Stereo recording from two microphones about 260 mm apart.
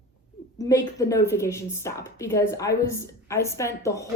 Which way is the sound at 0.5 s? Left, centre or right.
Centre.